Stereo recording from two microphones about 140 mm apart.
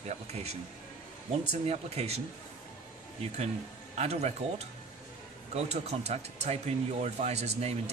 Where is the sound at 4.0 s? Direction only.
50° right (ahead or behind).